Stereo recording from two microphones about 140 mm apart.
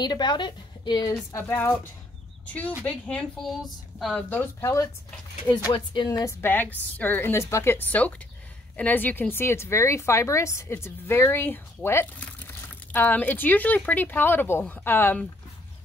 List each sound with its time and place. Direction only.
0.0 s speech: 30° left (ahead or behind)
1.3 s speech: 15° left (ahead or behind)
2.8 s speech: 10° left (ahead or behind)
4.6 s speech: 20° left (ahead or behind)
6.0 s speech: 25° left (ahead or behind)